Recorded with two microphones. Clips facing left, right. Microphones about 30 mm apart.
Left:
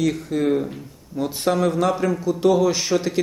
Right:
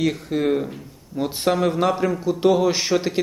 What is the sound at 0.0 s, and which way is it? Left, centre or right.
A man's voice, centre.